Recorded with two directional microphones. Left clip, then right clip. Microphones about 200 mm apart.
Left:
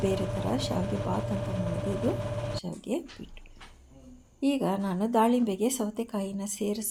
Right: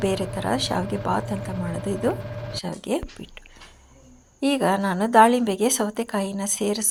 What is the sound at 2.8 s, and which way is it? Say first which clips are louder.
A woman's voice: right 7 dB; 5° right (ahead or behind).